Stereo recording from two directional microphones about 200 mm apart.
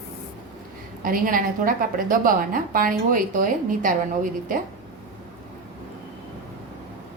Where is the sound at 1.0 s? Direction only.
45° right (ahead or behind).